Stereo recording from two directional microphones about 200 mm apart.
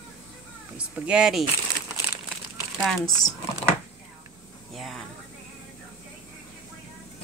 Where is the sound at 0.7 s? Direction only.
5° right (ahead or behind).